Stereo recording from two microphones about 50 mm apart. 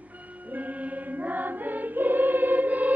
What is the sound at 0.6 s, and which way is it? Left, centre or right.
Music, right.